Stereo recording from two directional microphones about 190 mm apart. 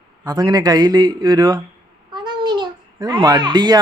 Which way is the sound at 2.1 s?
25° right (ahead or behind).